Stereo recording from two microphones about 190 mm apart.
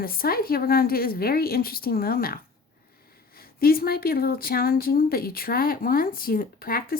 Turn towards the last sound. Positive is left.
turn(degrees=50)  # may be behind; listen again after turning